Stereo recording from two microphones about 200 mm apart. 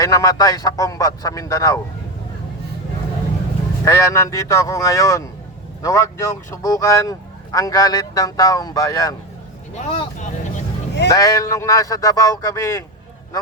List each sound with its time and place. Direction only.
0.0 s speech: 15° left (ahead or behind)
3.8 s speech: 15° left (ahead or behind)
9.7 s speech: 30° left (ahead or behind)
11.1 s speech: 15° left (ahead or behind)